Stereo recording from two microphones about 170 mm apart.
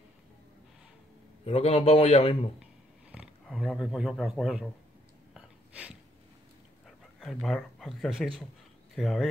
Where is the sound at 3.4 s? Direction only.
5° left (ahead or behind).